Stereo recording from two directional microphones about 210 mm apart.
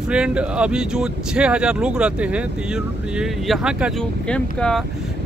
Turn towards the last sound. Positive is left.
turn(degrees=5)  # may be behind; listen again after turning